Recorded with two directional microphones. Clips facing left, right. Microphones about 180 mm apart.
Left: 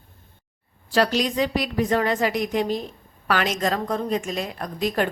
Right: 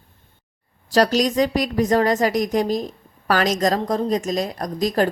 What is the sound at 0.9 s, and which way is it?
A woman's voice, 40° right (ahead or behind).